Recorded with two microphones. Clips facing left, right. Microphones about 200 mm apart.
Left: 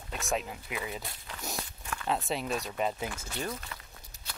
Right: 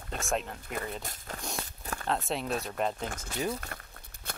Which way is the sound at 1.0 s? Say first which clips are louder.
Right 3 dB; 45° right (ahead or behind).